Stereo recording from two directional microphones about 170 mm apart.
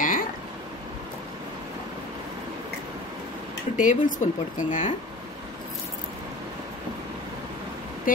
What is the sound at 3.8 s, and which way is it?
Speech, 45° left (ahead or behind).